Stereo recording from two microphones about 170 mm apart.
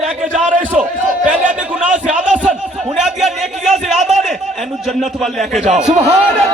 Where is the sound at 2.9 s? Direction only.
Centre (ahead or behind).